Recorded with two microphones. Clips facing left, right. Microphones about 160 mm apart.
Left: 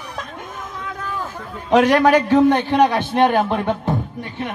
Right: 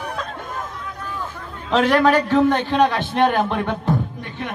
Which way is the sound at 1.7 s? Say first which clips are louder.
Left 3 dB; 15° left (ahead or behind).